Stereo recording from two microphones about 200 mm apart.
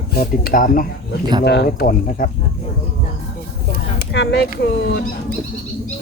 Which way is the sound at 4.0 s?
55° left (ahead or behind).